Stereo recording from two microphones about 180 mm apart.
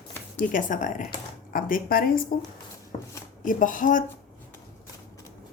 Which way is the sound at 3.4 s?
45° left (ahead or behind).